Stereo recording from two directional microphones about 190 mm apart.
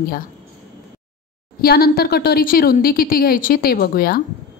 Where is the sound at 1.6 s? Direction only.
55° left (ahead or behind).